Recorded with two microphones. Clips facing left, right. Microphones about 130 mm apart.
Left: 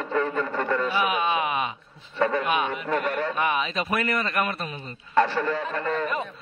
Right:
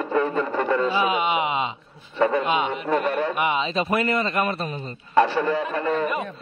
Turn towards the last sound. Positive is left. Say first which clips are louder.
# right 3 dB
turn(degrees=-10)  # may be behind; listen again after turning